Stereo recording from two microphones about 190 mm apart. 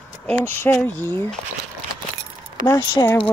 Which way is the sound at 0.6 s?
10° left (ahead or behind).